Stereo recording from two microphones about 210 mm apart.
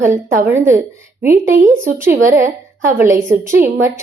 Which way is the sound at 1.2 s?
40° right (ahead or behind).